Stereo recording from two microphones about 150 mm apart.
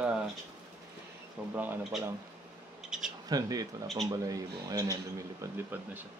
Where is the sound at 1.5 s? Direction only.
10° right (ahead or behind).